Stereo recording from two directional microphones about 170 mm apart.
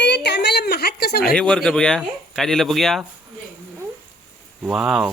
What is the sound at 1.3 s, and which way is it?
Speech, 5° left (ahead or behind).